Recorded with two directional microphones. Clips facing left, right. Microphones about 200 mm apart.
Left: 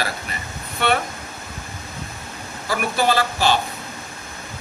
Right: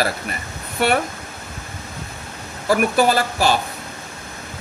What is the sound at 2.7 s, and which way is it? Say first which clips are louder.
Speech: right 4 dB; 45° right (ahead or behind).